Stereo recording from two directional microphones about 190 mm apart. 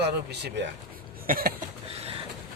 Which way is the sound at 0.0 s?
60° right (ahead or behind).